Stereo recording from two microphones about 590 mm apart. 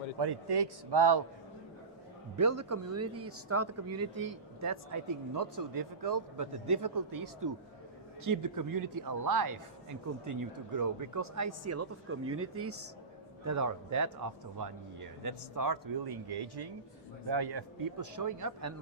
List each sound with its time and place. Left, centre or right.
0.2 s speech: right
2.4 s speech: right
15.2 s speech: right